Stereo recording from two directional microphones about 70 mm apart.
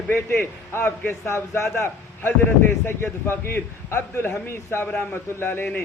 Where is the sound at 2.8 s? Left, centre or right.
Left.